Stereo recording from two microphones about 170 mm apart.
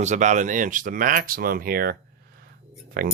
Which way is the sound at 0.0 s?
45° right (ahead or behind).